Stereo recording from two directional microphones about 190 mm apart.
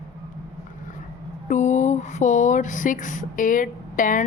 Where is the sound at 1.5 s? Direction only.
40° left (ahead or behind).